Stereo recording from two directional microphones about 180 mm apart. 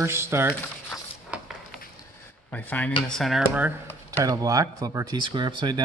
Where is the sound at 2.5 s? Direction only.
10° left (ahead or behind).